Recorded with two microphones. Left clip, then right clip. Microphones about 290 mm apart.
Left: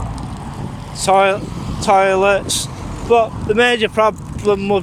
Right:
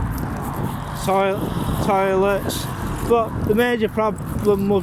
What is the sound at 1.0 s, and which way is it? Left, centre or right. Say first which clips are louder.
Speech: left 7 dB; left.